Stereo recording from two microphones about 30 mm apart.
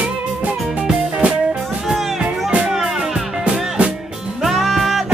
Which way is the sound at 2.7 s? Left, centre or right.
Centre.